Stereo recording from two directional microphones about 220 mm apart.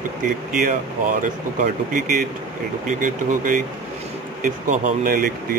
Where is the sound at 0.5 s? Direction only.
40° right (ahead or behind).